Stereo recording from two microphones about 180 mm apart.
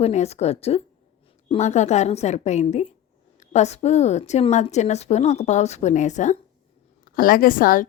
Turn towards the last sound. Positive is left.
turn(degrees=50)  # may be behind; listen again after turning